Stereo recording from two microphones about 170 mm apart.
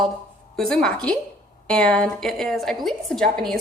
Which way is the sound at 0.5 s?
5° left (ahead or behind).